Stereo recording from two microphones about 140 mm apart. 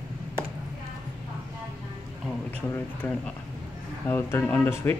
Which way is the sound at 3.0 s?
15° left (ahead or behind).